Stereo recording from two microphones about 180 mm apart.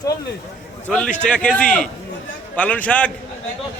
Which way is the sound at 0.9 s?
5° left (ahead or behind).